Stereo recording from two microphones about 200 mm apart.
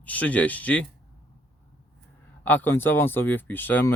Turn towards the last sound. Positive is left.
turn(degrees=10)  # may be behind; listen again after turning